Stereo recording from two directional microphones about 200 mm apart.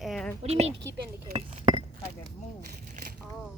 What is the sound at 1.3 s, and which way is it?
Chink, 30° right (ahead or behind).